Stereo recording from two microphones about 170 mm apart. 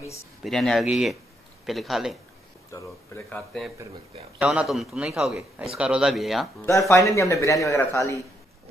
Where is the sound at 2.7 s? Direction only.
15° left (ahead or behind).